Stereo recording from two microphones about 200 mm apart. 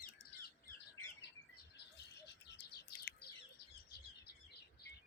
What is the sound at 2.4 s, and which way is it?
Bird, 60° left (ahead or behind).